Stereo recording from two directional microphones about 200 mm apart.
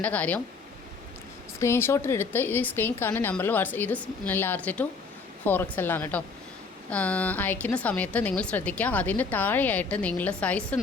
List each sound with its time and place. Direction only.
0.0 s a woman's voice: 5° left (ahead or behind)
1.5 s a woman's voice: 15° left (ahead or behind)